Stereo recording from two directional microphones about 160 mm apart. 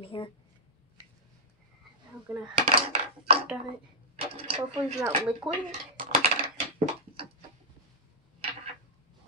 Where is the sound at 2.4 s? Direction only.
35° right (ahead or behind).